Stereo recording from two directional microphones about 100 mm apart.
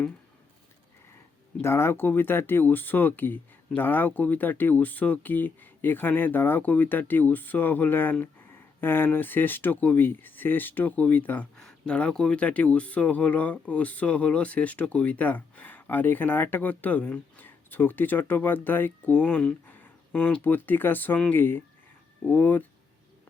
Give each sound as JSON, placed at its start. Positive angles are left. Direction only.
{"t": 1.6, "sound": "speech", "side_deg": 25}
{"t": 11.5, "sound": "speech", "side_deg": 5}